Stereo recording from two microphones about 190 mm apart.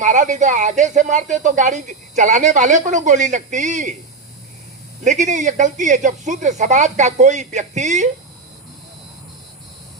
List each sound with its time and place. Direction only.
0.0 s speech: 40° right (ahead or behind)
5.0 s speech: 40° right (ahead or behind)